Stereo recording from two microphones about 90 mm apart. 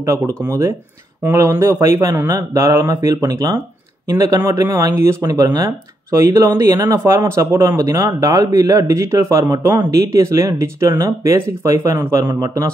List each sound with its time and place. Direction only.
0.0 s speech: 35° right (ahead or behind)